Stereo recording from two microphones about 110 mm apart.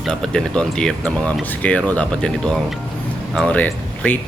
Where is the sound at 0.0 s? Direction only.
5° left (ahead or behind).